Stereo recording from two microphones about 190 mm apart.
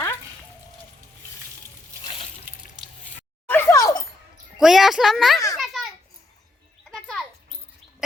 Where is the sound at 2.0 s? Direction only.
30° left (ahead or behind).